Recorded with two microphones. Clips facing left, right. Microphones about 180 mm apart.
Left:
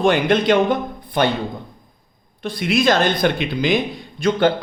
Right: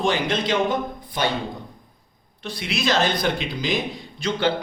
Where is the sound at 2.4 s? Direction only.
50° left (ahead or behind).